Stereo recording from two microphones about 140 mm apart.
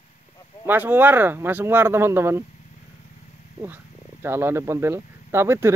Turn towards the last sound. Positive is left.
turn(degrees=-20)  # may be behind; listen again after turning